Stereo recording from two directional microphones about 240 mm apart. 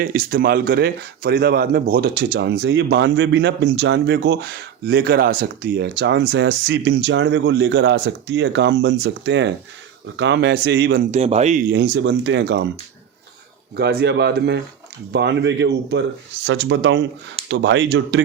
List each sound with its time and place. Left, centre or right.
0.0 s speech: right
11.1 s speech: right
11.7 s speech: right
13.7 s speech: right